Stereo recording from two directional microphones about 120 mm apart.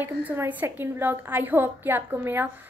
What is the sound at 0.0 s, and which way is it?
A woman's voice, 15° right (ahead or behind).